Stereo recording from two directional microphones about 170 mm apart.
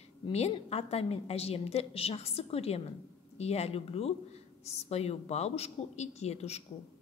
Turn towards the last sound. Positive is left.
turn(degrees=40)  # may be behind; listen again after turning